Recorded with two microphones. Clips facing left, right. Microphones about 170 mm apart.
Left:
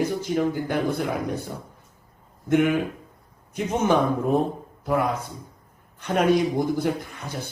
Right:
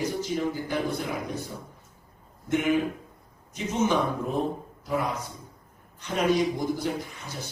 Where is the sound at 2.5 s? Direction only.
55° left (ahead or behind).